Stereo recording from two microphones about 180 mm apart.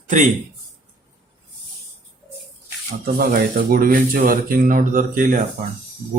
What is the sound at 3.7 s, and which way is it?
Speech, 50° right (ahead or behind).